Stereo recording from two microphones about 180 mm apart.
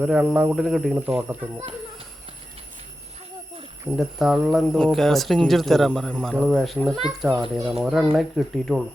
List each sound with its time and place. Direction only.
0.0 s speech: 5° right (ahead or behind)
3.8 s speech: centre (ahead or behind)